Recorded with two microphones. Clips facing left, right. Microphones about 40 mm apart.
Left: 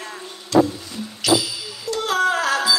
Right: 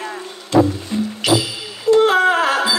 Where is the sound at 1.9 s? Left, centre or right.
Right.